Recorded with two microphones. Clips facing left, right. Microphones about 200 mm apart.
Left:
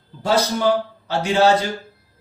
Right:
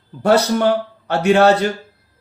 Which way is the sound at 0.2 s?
60° right (ahead or behind).